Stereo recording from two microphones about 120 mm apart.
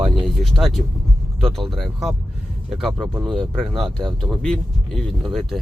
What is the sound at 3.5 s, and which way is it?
Speech, centre (ahead or behind).